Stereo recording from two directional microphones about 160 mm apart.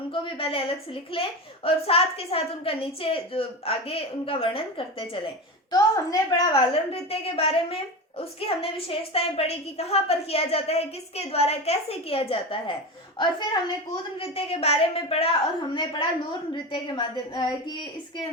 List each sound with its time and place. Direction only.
0.1 s a woman's voice: 35° left (ahead or behind)
5.7 s speech: 25° left (ahead or behind)
6.9 s a woman's voice: 40° left (ahead or behind)